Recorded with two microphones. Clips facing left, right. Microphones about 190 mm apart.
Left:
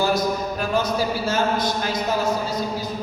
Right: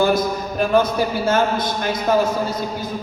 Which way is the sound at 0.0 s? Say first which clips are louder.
Right 3 dB; 55° right (ahead or behind).